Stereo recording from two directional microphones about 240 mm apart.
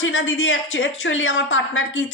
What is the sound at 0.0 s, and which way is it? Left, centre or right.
A woman's voice, left.